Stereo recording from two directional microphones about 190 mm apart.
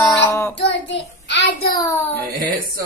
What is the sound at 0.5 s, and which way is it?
Child singing, 65° left (ahead or behind).